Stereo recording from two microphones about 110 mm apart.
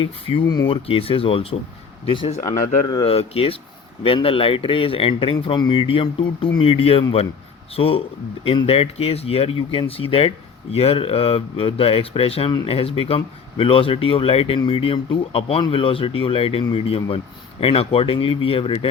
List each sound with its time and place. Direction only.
0.0 s speech: 55° left (ahead or behind)